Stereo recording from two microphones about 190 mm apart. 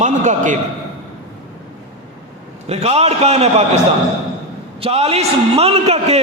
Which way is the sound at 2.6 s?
35° right (ahead or behind).